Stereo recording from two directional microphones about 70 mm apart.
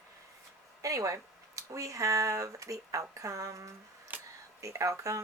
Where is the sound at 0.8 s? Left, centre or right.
Right.